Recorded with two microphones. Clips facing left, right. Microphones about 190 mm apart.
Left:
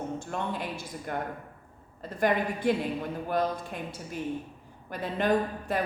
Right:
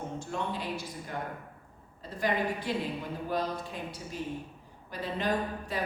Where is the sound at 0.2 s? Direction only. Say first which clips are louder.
Left 2 dB; 55° left (ahead or behind).